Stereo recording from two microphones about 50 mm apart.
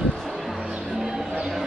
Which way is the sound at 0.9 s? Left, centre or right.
Centre.